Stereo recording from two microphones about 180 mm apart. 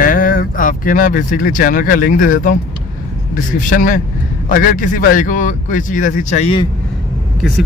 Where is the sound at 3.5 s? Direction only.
45° left (ahead or behind).